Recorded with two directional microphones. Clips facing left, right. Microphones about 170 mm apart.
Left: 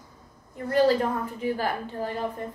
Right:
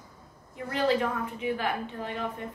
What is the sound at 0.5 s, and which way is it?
A woman's voice, 40° left (ahead or behind).